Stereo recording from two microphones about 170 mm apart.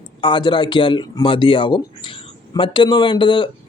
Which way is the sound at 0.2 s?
30° left (ahead or behind).